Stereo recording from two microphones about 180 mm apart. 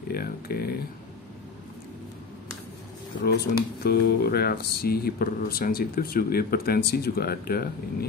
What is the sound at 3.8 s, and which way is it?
Speech, 65° left (ahead or behind).